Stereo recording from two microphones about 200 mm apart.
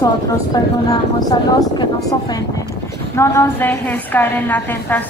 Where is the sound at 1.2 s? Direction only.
20° left (ahead or behind).